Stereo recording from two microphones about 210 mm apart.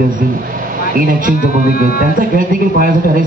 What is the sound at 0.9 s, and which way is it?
A man's voice, 40° right (ahead or behind).